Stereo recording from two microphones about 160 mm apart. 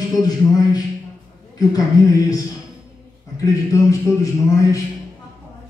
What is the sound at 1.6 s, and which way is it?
A man's voice, 20° left (ahead or behind).